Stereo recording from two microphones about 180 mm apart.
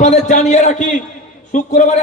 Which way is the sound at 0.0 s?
40° left (ahead or behind).